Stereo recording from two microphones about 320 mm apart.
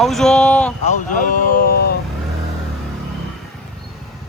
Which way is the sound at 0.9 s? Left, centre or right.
Left.